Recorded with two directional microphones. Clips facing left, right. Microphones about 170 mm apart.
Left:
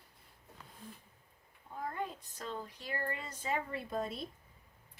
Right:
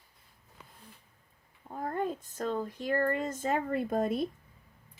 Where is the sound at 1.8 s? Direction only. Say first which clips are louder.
Right 7 dB; 50° right (ahead or behind).